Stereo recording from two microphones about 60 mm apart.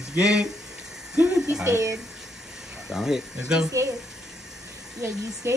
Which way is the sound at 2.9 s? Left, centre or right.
Centre.